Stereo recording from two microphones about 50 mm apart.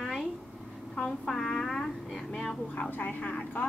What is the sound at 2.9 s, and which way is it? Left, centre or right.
Speech, left.